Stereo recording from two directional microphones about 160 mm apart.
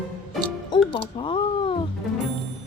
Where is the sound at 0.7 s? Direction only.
35° left (ahead or behind).